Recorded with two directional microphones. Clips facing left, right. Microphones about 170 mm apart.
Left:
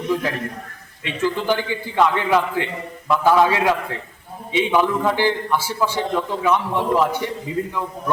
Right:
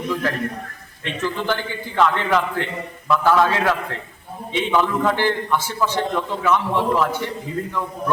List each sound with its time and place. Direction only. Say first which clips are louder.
0.1 s a man's voice: left 1 dB; 15° left (ahead or behind)